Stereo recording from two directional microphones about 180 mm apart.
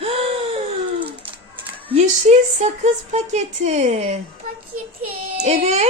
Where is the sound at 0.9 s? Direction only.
30° right (ahead or behind).